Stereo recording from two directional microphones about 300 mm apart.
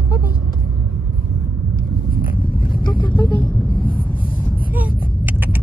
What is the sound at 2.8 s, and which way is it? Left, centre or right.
Vehicle, centre.